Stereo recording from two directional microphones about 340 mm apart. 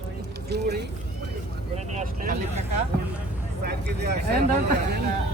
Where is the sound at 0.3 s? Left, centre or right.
Right.